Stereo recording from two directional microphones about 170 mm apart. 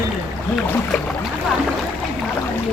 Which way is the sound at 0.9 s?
Centre (ahead or behind).